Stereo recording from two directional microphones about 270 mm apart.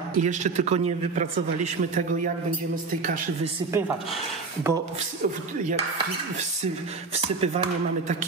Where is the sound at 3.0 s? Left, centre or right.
Right.